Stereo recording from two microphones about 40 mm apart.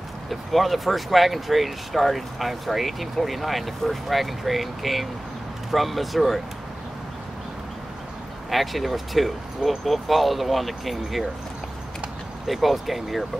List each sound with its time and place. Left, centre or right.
0.3 s speech: centre
8.5 s speech: centre
12.4 s speech: centre